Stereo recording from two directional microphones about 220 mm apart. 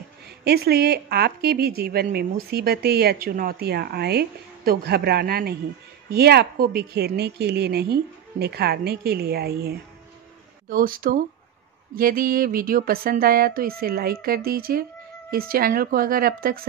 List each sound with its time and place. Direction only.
0.4 s speech: 45° right (ahead or behind)